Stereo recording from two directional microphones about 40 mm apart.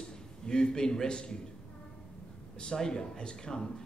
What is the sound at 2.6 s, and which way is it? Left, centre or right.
Speech, centre.